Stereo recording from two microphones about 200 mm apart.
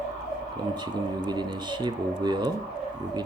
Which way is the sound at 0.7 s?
20° right (ahead or behind).